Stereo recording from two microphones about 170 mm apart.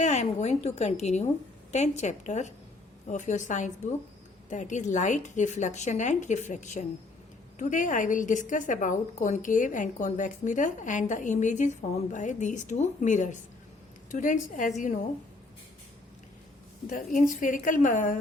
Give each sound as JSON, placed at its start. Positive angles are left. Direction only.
{"t": 0.0, "sound": "a woman's voice", "side_deg": 40}
{"t": 16.8, "sound": "a woman's voice", "side_deg": 50}